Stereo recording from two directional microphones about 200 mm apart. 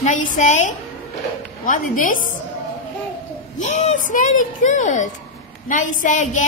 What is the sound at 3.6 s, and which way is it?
A woman's voice, 35° left (ahead or behind).